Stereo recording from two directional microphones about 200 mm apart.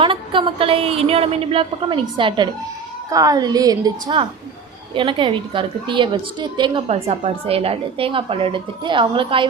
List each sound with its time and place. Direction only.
0.0 s a woman's voice: 25° right (ahead or behind)